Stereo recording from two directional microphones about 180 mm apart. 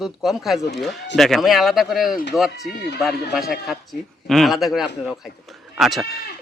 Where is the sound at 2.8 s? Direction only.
65° left (ahead or behind).